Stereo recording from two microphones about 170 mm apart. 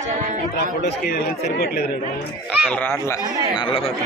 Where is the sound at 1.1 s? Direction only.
70° left (ahead or behind).